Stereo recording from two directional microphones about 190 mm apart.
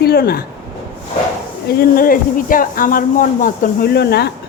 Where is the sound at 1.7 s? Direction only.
50° left (ahead or behind).